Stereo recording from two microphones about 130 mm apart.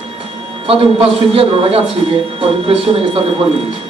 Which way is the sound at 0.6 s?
45° right (ahead or behind).